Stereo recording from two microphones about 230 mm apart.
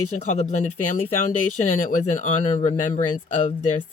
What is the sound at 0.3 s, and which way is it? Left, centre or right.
Speech, left.